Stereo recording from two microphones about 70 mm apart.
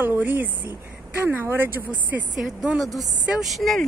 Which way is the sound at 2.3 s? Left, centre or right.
Centre.